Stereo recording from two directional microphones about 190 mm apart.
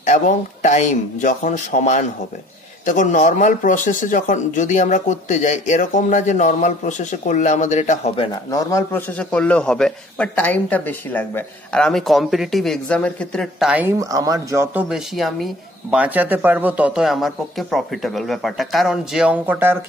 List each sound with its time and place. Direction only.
0.0 s speech: 40° left (ahead or behind)
8.3 s a man's voice: 20° left (ahead or behind); by 19.8 s 10° right (ahead or behind)